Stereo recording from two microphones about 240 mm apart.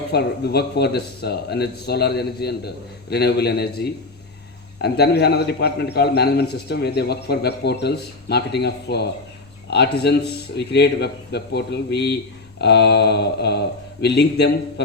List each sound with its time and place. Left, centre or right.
0.1 s a man's voice: left